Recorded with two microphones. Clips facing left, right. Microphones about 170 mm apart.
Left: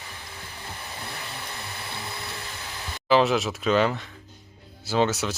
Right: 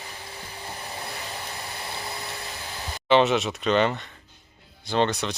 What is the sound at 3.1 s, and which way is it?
Speech, centre (ahead or behind).